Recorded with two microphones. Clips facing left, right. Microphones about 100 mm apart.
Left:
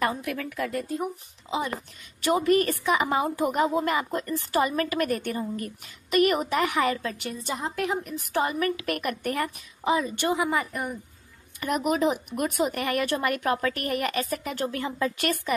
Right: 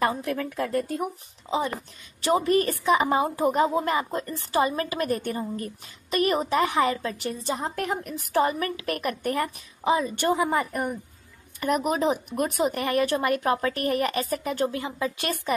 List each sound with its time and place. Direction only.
0.0 s a woman's voice: 30° right (ahead or behind)
14.7 s speech: 20° right (ahead or behind)